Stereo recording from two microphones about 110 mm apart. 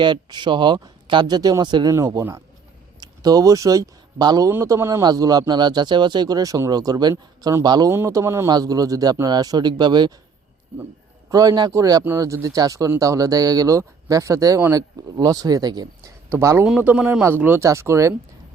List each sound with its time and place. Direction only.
0.0 s speech: 45° right (ahead or behind)
7.9 s speech: 30° right (ahead or behind)
8.4 s speech: 35° right (ahead or behind)
11.3 s speech: 35° right (ahead or behind)
16.3 s speech: 25° right (ahead or behind)
16.6 s speech: 10° right (ahead or behind); by 18.1 s 25° right (ahead or behind)